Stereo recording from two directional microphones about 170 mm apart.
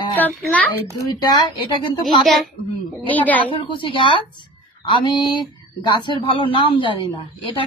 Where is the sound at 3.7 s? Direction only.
30° left (ahead or behind).